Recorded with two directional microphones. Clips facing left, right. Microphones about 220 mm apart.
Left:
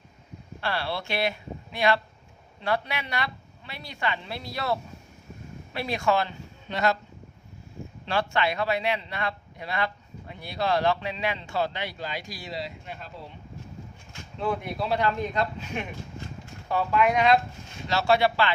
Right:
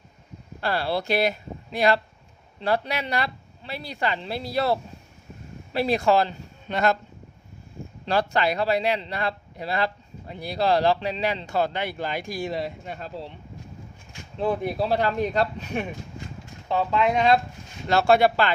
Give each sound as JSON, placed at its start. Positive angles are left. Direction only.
{"t": 0.6, "sound": "a man's voice", "side_deg": -40}
{"t": 6.7, "sound": "speech", "side_deg": -50}
{"t": 8.0, "sound": "a man's voice", "side_deg": -40}
{"t": 14.4, "sound": "a man's voice", "side_deg": -35}
{"t": 16.6, "sound": "speech", "side_deg": -25}
{"t": 17.8, "sound": "speech", "side_deg": -50}